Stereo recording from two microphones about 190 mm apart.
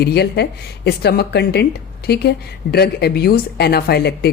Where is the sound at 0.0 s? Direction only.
60° left (ahead or behind).